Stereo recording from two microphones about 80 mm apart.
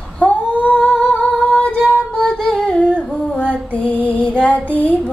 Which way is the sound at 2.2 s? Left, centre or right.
Centre.